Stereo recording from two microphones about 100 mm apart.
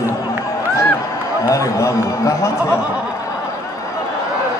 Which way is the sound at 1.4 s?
35° left (ahead or behind).